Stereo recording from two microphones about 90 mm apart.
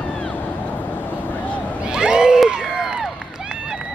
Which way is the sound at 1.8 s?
10° right (ahead or behind).